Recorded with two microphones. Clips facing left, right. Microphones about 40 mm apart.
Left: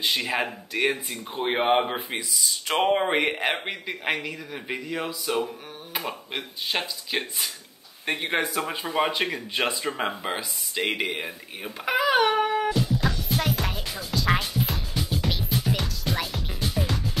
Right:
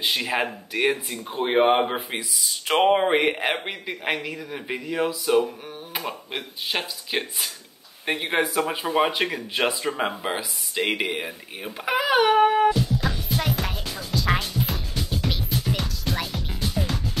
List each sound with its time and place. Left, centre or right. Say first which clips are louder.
0.0 s speech: right 1 dB; centre
13.3 s music: even; centre